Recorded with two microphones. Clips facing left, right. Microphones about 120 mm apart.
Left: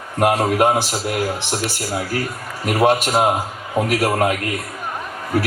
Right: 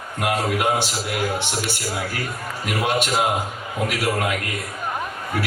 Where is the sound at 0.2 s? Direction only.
40° left (ahead or behind).